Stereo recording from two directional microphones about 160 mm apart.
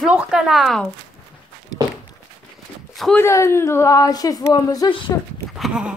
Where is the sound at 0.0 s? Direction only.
5° right (ahead or behind).